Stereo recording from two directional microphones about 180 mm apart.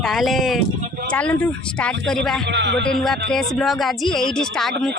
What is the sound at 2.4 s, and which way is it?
Speech, 75° right (ahead or behind).